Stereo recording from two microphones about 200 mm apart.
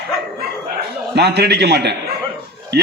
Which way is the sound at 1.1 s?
55° right (ahead or behind).